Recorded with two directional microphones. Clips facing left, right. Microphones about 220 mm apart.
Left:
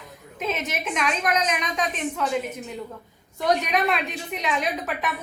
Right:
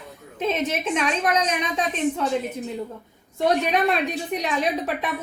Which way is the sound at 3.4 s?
30° right (ahead or behind).